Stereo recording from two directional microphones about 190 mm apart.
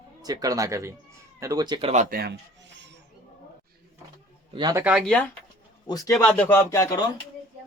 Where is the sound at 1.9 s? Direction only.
45° right (ahead or behind).